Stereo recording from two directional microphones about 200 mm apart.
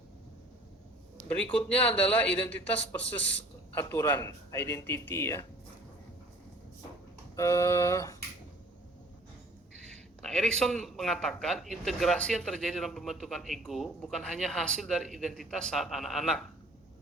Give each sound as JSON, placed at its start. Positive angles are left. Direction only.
{"t": 1.3, "sound": "speech", "side_deg": 5}
{"t": 7.3, "sound": "speech", "side_deg": 15}
{"t": 10.2, "sound": "a man's voice", "side_deg": 5}